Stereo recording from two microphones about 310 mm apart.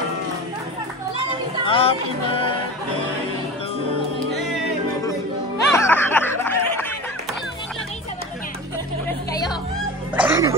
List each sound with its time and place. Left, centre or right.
1.7 s speech: centre
5.7 s snicker: centre
10.1 s music: centre